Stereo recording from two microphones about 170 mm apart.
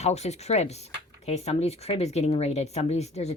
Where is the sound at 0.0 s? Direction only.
40° left (ahead or behind).